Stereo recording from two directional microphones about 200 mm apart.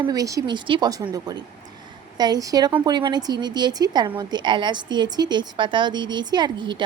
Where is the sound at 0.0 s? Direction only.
20° right (ahead or behind).